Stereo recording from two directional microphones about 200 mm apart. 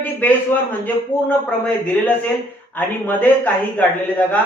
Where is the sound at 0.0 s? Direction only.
10° left (ahead or behind).